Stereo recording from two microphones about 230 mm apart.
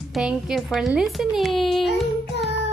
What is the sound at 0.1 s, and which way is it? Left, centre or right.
A woman's voice, centre.